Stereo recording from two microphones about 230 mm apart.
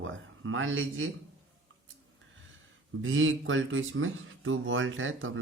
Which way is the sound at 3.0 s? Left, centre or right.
Right.